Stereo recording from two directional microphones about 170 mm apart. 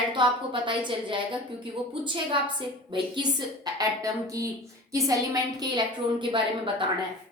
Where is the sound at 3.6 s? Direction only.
20° right (ahead or behind).